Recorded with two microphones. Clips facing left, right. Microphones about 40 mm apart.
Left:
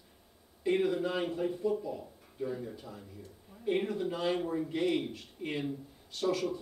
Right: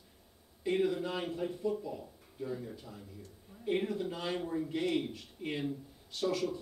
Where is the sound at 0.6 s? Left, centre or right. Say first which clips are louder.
Left 2 dB; centre.